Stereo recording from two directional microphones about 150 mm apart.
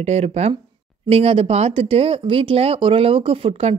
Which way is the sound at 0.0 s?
45° right (ahead or behind).